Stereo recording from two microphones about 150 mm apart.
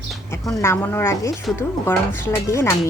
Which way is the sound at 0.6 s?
15° left (ahead or behind).